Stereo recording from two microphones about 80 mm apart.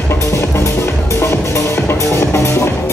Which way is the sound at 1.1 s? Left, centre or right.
Left.